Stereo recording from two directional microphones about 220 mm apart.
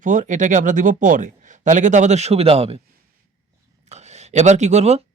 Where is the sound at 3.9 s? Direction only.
30° right (ahead or behind).